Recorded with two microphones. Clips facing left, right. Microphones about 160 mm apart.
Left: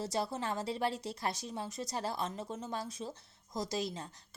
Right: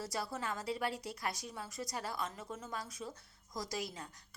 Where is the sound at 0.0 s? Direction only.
25° left (ahead or behind).